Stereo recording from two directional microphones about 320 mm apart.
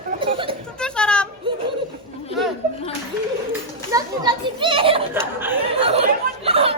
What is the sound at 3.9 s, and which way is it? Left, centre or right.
A child's voice, centre.